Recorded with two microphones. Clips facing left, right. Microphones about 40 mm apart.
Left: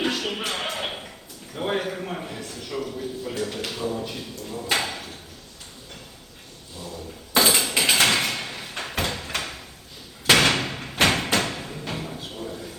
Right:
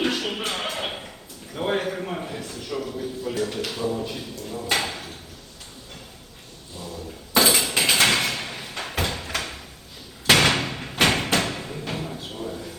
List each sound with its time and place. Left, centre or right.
0.0 s music: centre
1.5 s a man's voice: centre
7.3 s a sound: centre